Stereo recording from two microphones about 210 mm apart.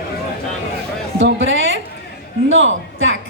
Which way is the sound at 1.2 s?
65° right (ahead or behind).